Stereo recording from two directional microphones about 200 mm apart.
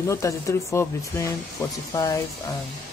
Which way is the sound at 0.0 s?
15° left (ahead or behind).